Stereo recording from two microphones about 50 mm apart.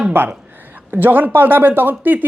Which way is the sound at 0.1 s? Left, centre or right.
Right.